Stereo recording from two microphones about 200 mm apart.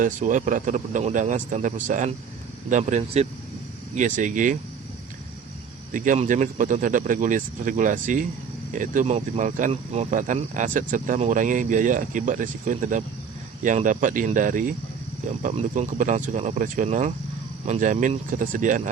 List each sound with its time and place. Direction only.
0.0 s speech: 40° right (ahead or behind)
5.9 s speech: 40° right (ahead or behind)